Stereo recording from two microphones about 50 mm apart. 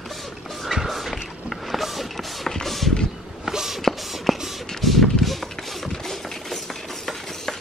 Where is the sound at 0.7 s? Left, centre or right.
Centre.